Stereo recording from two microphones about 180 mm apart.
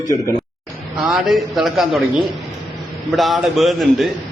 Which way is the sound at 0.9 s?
Centre (ahead or behind).